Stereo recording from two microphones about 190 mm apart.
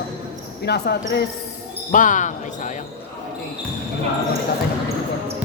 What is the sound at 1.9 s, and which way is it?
Speech, 45° left (ahead or behind).